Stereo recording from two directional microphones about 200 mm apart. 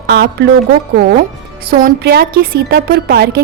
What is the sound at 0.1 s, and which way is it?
A woman's voice, 55° right (ahead or behind).